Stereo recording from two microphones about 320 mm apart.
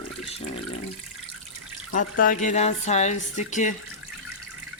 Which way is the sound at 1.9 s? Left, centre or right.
Left.